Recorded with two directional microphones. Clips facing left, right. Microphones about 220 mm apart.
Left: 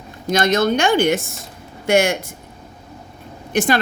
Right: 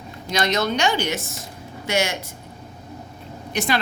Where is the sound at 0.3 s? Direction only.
50° left (ahead or behind).